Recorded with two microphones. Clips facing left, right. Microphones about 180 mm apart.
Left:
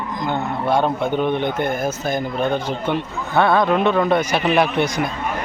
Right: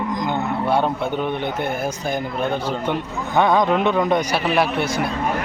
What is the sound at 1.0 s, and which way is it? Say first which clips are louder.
A man's voice: left 3 dB; 10° right (ahead or behind).